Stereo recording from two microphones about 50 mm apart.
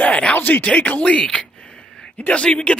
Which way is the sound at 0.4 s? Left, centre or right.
Left.